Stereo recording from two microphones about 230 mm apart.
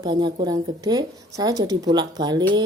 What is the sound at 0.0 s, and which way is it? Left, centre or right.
Speech, centre.